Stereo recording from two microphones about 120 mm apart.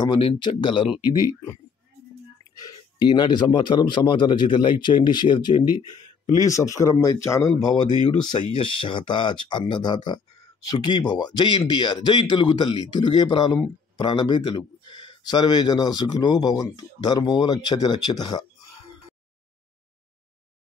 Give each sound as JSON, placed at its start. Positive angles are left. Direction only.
{"t": 0.0, "sound": "speech", "side_deg": 45}
{"t": 2.5, "sound": "speech", "side_deg": 30}
{"t": 8.2, "sound": "speech", "side_deg": 40}